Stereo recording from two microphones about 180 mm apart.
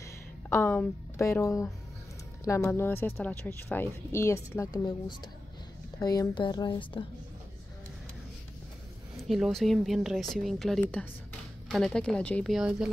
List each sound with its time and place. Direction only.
0.5 s a woman's voice: 10° left (ahead or behind); by 7.1 s 25° left (ahead or behind)
9.1 s speech: centre (ahead or behind)